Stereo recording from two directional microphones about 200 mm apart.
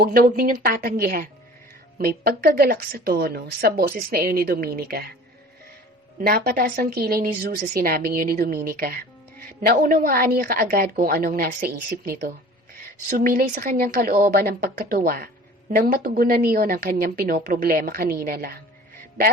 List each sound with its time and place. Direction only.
0.0 s a woman's voice: 45° right (ahead or behind)
6.1 s a woman's voice: 50° right (ahead or behind)